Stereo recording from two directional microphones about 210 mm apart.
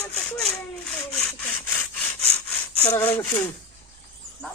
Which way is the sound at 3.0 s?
10° left (ahead or behind).